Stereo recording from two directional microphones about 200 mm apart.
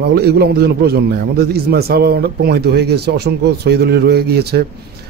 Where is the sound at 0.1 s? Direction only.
55° right (ahead or behind).